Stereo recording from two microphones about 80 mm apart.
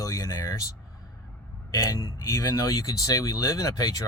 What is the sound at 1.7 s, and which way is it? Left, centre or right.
Speech, left.